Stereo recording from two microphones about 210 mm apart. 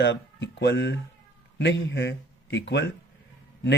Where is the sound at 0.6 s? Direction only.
55° left (ahead or behind).